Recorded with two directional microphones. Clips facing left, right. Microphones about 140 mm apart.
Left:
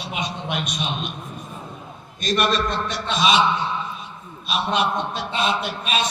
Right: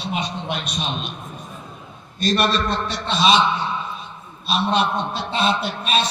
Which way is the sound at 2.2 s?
35° right (ahead or behind).